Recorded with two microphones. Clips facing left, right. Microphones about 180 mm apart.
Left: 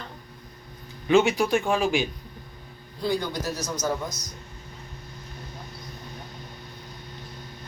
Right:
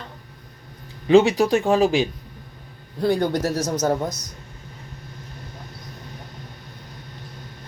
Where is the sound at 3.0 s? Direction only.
60° right (ahead or behind); by 3.9 s 80° right.